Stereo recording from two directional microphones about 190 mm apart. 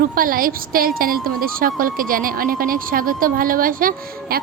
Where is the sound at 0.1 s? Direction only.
50° right (ahead or behind).